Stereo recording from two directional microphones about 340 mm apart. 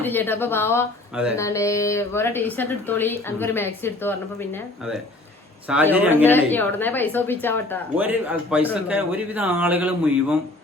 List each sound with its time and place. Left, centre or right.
0.0 s a woman's voice: centre
1.1 s speech: centre
1.4 s a woman's voice: centre
5.6 s speech: centre
6.2 s speech: centre
7.9 s speech: centre